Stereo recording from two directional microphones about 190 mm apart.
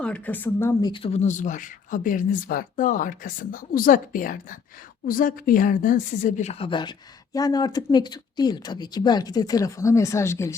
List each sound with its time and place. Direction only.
0.0 s speech: 10° left (ahead or behind)